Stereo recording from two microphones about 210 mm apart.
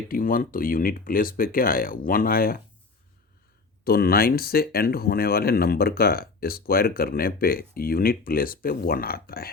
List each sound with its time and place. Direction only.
0.1 s speech: 40° left (ahead or behind)
3.8 s speech: 45° left (ahead or behind)